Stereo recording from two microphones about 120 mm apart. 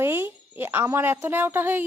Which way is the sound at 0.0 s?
20° right (ahead or behind).